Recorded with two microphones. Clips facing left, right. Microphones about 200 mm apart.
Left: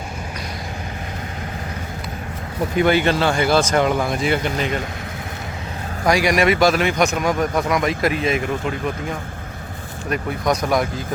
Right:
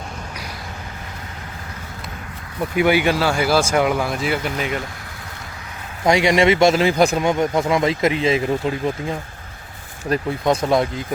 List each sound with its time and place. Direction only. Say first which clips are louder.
2.7 s speech: even; 10° right (ahead or behind)
6.1 s a man's voice: right 2 dB; 25° right (ahead or behind)
10.1 s a man's voice: right 2 dB; 30° right (ahead or behind)